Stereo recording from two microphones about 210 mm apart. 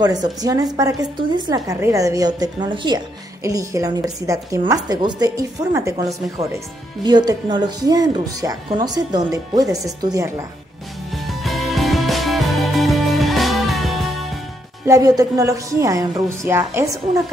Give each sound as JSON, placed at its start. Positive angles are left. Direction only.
{"t": 0.0, "sound": "a woman's voice", "side_deg": -20}
{"t": 11.1, "sound": "music", "side_deg": 0}
{"t": 14.9, "sound": "a woman's voice", "side_deg": -15}